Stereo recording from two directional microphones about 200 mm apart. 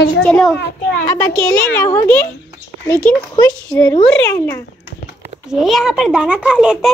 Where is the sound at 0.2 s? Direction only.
5° left (ahead or behind).